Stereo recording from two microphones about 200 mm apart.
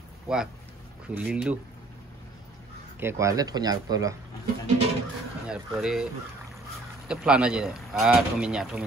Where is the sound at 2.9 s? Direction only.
15° right (ahead or behind).